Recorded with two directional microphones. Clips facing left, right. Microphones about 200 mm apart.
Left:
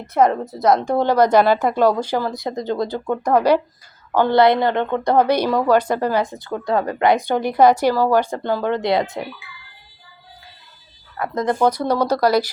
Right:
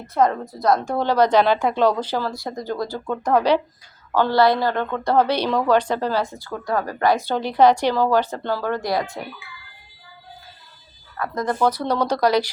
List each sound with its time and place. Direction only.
0.1 s a woman's voice: 20° left (ahead or behind)
11.2 s speech: 20° left (ahead or behind)
11.8 s a woman's voice: 10° left (ahead or behind)